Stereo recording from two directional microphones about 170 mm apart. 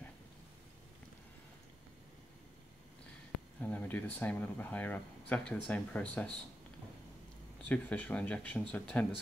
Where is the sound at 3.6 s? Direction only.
10° left (ahead or behind).